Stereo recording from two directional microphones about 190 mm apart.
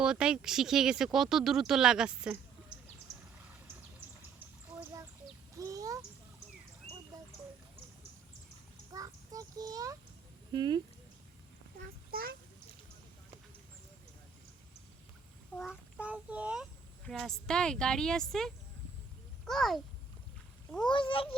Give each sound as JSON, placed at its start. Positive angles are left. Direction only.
{"t": 0.0, "sound": "speech", "side_deg": -5}
{"t": 4.7, "sound": "a sound", "side_deg": -15}
{"t": 7.1, "sound": "a sound", "side_deg": -20}
{"t": 8.9, "sound": "child singing", "side_deg": -20}
{"t": 10.5, "sound": "speech", "side_deg": -25}
{"t": 12.1, "sound": "a sound", "side_deg": -50}
{"t": 15.7, "sound": "child singing", "side_deg": -5}
{"t": 17.1, "sound": "a child's voice", "side_deg": 0}
{"t": 20.9, "sound": "a child's voice", "side_deg": 25}